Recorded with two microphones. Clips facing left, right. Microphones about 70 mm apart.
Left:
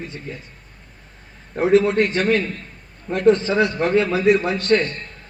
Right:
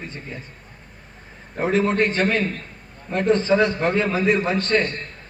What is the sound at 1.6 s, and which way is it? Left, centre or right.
A man's voice, right.